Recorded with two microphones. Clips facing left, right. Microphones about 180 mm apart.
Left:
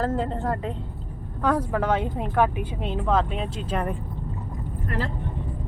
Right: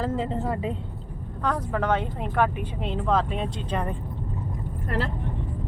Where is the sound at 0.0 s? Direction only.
Centre (ahead or behind).